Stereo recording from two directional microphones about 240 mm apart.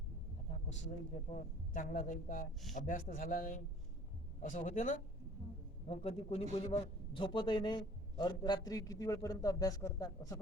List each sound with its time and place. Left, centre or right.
1.7 s a man's voice: left; by 10.3 s centre